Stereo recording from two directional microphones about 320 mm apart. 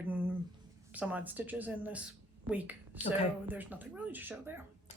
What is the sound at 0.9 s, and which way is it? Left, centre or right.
A woman's voice, centre.